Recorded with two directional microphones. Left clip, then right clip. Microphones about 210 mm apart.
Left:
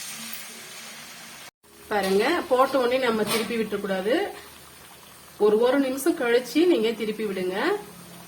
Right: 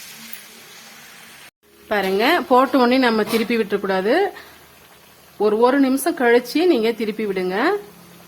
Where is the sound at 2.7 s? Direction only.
55° right (ahead or behind).